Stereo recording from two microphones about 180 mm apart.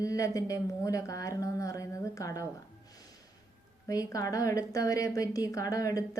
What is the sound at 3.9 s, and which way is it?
A woman's voice, 20° left (ahead or behind).